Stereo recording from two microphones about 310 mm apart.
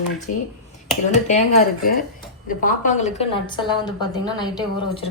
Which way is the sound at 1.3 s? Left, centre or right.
Left.